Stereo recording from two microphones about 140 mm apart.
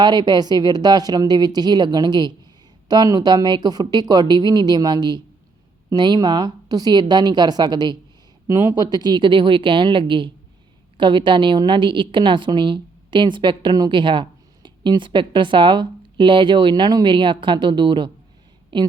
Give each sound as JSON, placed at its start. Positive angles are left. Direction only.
{"t": 0.0, "sound": "a woman's voice", "side_deg": -30}